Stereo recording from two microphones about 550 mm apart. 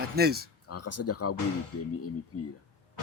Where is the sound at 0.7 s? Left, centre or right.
Left.